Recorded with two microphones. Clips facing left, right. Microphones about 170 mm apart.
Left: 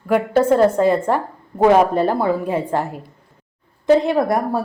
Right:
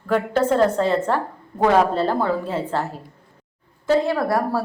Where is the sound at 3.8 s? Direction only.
20° left (ahead or behind).